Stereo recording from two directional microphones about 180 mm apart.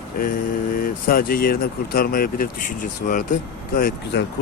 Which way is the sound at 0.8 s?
50° left (ahead or behind).